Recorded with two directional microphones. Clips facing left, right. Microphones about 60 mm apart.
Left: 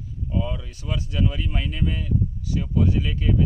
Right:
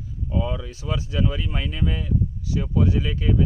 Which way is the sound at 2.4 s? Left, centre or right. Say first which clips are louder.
Right 1 dB; centre.